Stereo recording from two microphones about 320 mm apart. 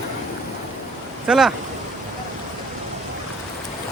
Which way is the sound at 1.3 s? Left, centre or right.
Centre.